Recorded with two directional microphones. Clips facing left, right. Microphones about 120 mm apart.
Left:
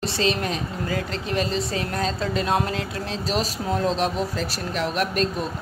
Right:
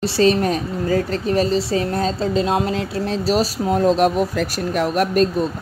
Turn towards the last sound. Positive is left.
turn(degrees=-50)  # may be behind; listen again after turning